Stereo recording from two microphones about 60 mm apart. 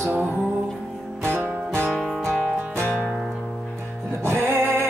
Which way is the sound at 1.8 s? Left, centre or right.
Centre.